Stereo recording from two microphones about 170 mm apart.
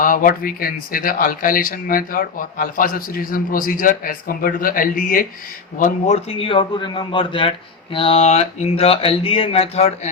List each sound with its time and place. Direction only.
0.0 s speech: 55° left (ahead or behind)
5.8 s speech: 40° left (ahead or behind)